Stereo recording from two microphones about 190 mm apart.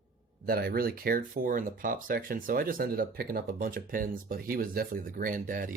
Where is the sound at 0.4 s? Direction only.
55° right (ahead or behind).